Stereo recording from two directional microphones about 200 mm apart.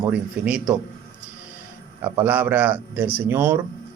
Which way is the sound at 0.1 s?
5° right (ahead or behind).